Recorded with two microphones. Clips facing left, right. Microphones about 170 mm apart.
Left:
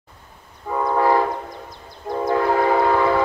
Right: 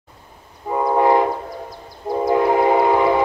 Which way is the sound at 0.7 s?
20° right (ahead or behind).